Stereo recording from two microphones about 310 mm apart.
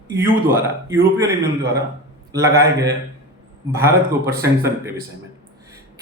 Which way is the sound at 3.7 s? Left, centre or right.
Centre.